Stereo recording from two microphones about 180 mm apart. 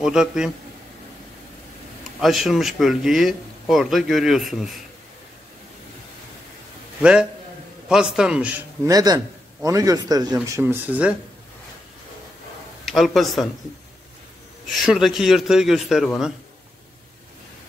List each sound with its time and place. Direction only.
0.0 s a man's voice: 5° right (ahead or behind)
2.1 s a man's voice: centre (ahead or behind)
7.0 s a man's voice: 5° right (ahead or behind)
12.8 s a man's voice: centre (ahead or behind)
14.7 s a man's voice: centre (ahead or behind)